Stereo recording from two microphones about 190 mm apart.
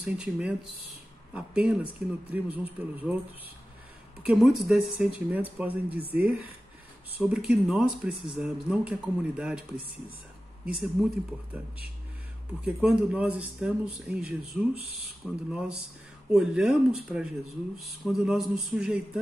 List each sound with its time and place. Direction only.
0.0 s a man's voice: 5° right (ahead or behind)
4.2 s a man's voice: centre (ahead or behind)
11.0 s a man's voice: 5° right (ahead or behind)
12.6 s speech: 5° right (ahead or behind)